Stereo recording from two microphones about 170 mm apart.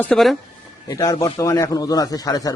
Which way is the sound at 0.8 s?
20° left (ahead or behind).